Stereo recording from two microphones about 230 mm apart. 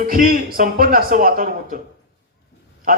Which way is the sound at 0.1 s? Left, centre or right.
Right.